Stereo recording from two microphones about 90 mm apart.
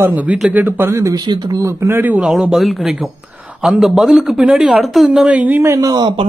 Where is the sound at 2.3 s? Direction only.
5° right (ahead or behind).